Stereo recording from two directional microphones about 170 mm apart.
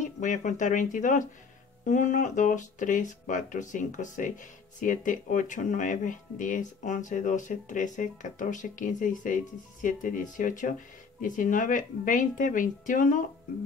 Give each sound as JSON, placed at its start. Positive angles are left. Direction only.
{"t": 0.0, "sound": "speech", "side_deg": 45}